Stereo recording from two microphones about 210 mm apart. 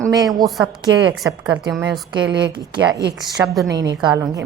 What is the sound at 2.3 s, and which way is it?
Speech, 55° right (ahead or behind).